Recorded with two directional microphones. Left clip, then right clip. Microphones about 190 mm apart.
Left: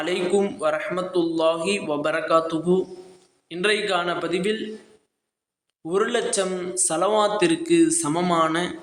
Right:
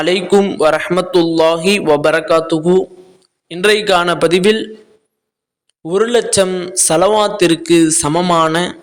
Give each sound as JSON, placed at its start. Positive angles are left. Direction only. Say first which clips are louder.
{"t": 0.0, "sound": "a man's voice", "louder": "right 10 dB", "side_deg": -45}
{"t": 5.8, "sound": "a man's voice", "louder": "right 9 dB", "side_deg": -45}